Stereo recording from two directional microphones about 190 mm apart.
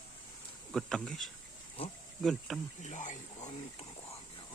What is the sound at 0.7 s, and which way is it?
Speech, 5° left (ahead or behind).